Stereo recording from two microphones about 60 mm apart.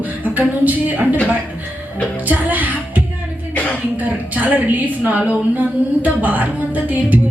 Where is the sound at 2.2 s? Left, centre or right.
Right.